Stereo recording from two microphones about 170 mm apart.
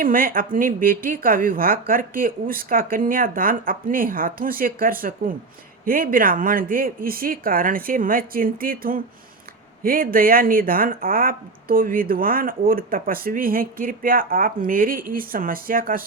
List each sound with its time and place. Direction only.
0.0 s speech: 55° right (ahead or behind)